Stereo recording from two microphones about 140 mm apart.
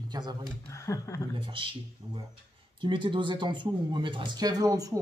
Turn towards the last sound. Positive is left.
turn(degrees=-25)  # may be behind; listen again after turning